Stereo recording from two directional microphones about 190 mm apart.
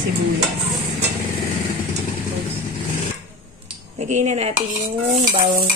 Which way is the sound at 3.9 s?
35° right (ahead or behind).